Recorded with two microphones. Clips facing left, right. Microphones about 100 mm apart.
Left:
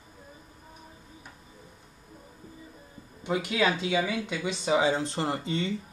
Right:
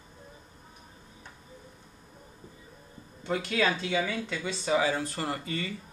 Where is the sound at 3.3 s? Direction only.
15° left (ahead or behind).